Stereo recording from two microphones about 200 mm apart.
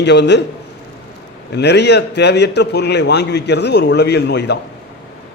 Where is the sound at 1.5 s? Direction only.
60° left (ahead or behind).